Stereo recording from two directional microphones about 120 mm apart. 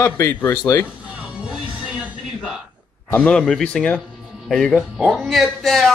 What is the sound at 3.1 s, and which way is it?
Speech, 10° left (ahead or behind).